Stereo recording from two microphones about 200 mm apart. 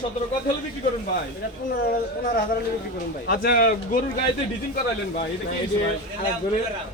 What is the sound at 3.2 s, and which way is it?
Speech, 50° left (ahead or behind).